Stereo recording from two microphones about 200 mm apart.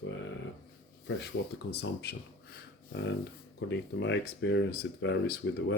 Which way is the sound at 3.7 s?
60° left (ahead or behind).